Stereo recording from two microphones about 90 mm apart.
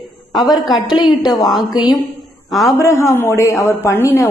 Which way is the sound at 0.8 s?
55° left (ahead or behind).